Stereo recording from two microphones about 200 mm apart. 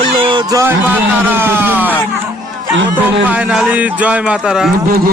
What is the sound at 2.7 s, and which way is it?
Speech, 65° right (ahead or behind).